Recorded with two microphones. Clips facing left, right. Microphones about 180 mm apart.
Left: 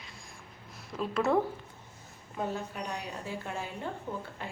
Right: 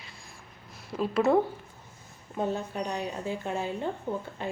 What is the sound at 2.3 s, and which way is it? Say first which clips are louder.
A woman's voice: right 5 dB; 25° right (ahead or behind).